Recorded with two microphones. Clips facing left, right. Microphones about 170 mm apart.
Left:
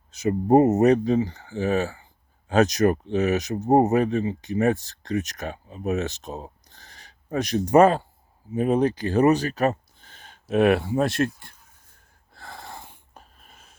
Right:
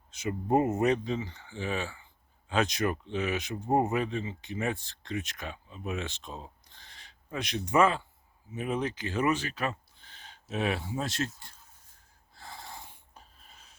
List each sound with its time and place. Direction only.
0.1 s speech: 40° left (ahead or behind)
10.5 s speech: 60° left (ahead or behind)
12.3 s wheeze: 60° left (ahead or behind)